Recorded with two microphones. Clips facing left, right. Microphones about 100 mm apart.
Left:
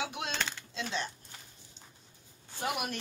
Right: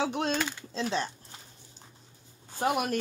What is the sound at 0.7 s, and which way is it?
Speech, 35° right (ahead or behind).